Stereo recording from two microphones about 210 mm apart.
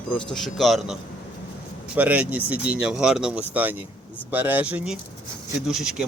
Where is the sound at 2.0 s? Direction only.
5° right (ahead or behind).